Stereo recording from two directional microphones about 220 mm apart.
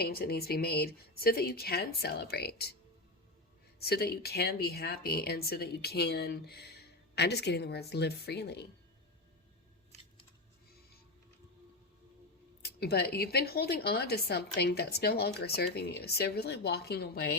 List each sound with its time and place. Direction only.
0.0 s speech: 45° left (ahead or behind)
3.8 s speech: 45° left (ahead or behind)
12.6 s speech: 45° left (ahead or behind)